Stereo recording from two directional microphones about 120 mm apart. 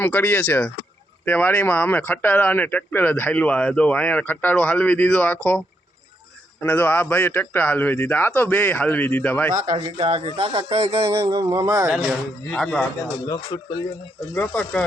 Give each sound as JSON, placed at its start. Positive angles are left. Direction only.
{"t": 0.0, "sound": "speech", "side_deg": 15}
{"t": 6.6, "sound": "speech", "side_deg": 15}
{"t": 9.5, "sound": "a man's voice", "side_deg": -90}
{"t": 9.7, "sound": "a man's voice", "side_deg": -50}
{"t": 12.5, "sound": "a man's voice", "side_deg": 5}
{"t": 13.2, "sound": "speech", "side_deg": 30}
{"t": 14.3, "sound": "speech", "side_deg": 10}